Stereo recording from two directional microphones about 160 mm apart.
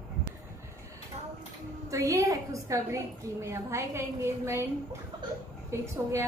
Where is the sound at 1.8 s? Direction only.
20° right (ahead or behind).